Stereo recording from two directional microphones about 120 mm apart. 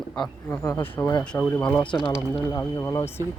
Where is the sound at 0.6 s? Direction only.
20° left (ahead or behind).